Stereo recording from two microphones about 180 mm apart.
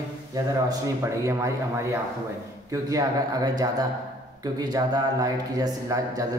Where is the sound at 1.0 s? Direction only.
15° right (ahead or behind).